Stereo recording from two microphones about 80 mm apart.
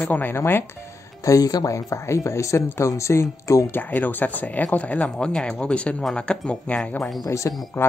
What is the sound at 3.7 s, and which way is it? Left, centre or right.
Speech, left.